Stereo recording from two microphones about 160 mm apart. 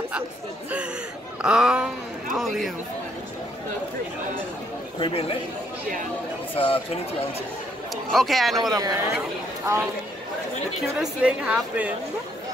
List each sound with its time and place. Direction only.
1.4 s a sound: 5° right (ahead or behind)
2.3 s speech: centre (ahead or behind)
4.9 s speech: 35° left (ahead or behind)
6.5 s speech: 35° left (ahead or behind)
7.9 s speech: centre (ahead or behind)
8.5 s speech: 25° right (ahead or behind)
11.0 s a woman's voice: 5° right (ahead or behind)